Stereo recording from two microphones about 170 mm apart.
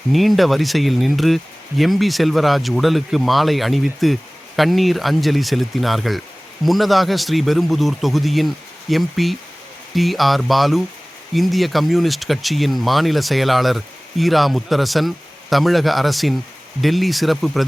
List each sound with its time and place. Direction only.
0.1 s speech: centre (ahead or behind)